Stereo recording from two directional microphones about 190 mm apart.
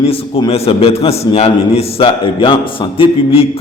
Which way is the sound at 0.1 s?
30° left (ahead or behind).